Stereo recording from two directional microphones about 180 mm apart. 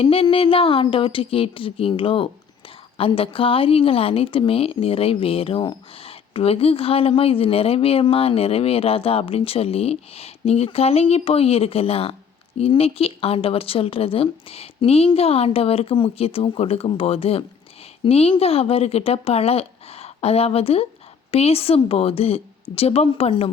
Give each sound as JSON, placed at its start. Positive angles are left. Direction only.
{"t": 0.0, "sound": "a woman's voice", "side_deg": 30}